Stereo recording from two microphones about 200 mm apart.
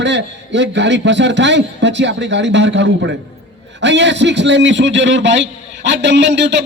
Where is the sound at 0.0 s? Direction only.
65° right (ahead or behind).